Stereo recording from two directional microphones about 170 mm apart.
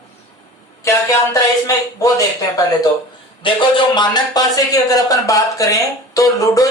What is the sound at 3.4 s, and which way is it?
Speech, 30° left (ahead or behind).